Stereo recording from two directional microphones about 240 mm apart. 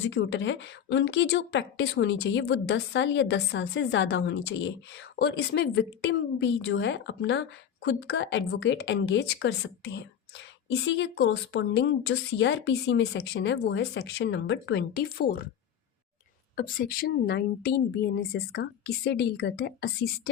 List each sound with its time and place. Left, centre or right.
0.0 s a woman's voice: left
16.6 s a woman's voice: left